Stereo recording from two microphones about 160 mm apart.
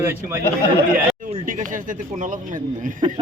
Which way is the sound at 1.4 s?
55° right (ahead or behind).